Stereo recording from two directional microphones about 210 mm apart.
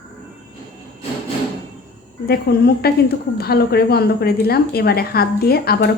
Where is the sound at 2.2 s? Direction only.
50° left (ahead or behind).